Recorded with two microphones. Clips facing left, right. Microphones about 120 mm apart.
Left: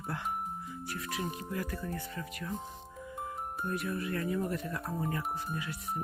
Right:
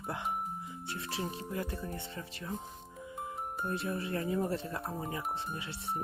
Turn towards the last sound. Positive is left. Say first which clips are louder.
# left 1 dB
turn(degrees=-25)  # may be behind; listen again after turning